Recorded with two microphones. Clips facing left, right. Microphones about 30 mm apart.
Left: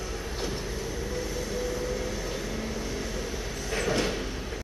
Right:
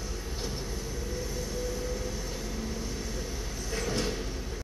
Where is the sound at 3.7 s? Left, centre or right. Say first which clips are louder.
Left 4 dB; left.